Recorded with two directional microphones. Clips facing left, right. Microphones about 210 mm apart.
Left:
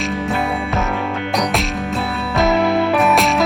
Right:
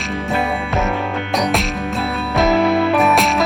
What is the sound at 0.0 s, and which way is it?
Music, centre (ahead or behind).